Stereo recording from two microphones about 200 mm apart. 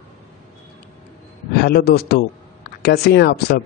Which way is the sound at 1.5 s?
50° left (ahead or behind).